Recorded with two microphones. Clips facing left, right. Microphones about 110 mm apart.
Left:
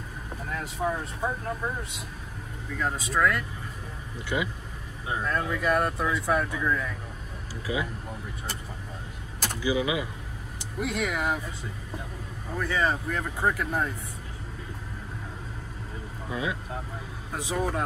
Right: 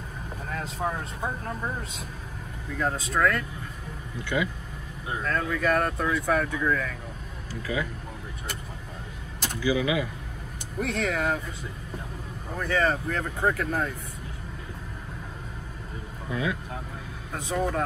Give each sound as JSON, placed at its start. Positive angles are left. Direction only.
{"t": 0.6, "sound": "speech", "side_deg": -5}
{"t": 2.9, "sound": "speech", "side_deg": 10}
{"t": 9.6, "sound": "speech", "side_deg": 20}
{"t": 10.8, "sound": "speech", "side_deg": 10}
{"t": 12.6, "sound": "speech", "side_deg": 10}
{"t": 16.3, "sound": "speech", "side_deg": 25}